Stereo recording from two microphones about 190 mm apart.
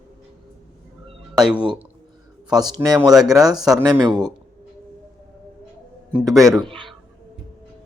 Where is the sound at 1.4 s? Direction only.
5° right (ahead or behind).